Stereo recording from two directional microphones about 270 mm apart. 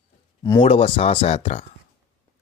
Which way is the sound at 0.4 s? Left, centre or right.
Centre.